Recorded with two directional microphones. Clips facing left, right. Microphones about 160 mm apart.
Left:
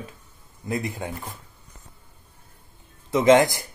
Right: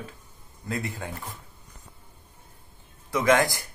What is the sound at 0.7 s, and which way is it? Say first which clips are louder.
Speech: left 4 dB; 15° left (ahead or behind).